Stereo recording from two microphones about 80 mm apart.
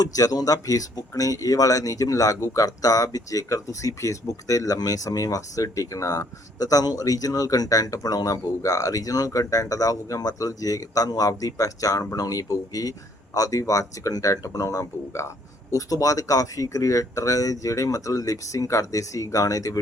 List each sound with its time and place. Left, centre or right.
0.0 s speech: left